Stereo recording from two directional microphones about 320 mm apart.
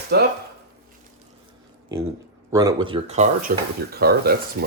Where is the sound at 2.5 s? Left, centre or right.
Centre.